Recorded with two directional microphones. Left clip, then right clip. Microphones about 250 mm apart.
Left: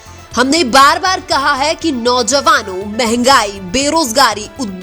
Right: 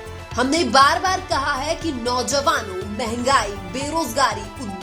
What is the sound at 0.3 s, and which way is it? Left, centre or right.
Speech, left.